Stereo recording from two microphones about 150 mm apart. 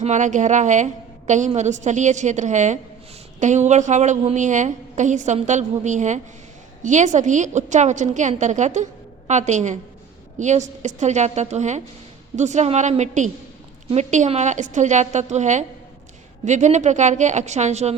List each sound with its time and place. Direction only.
0.0 s a woman's voice: 55° right (ahead or behind)